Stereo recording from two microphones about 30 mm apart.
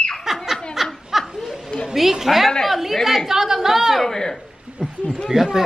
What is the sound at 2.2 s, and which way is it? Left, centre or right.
Speech, centre.